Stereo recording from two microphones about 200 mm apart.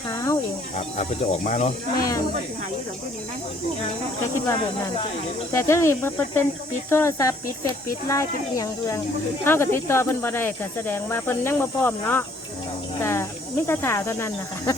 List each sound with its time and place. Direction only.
0.1 s music: 15° left (ahead or behind)
0.8 s speech: 35° left (ahead or behind)
5.5 s speech: 15° left (ahead or behind)